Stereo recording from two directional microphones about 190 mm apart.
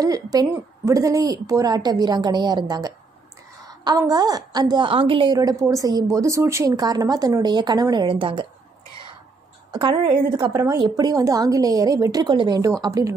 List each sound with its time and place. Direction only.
0.0 s a woman's voice: 20° right (ahead or behind)
9.7 s a woman's voice: 25° right (ahead or behind)